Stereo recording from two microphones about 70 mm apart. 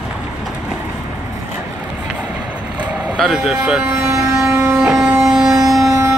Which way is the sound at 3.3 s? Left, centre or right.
Centre.